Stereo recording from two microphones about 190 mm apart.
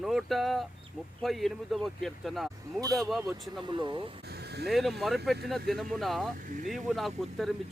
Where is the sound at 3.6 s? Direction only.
25° right (ahead or behind).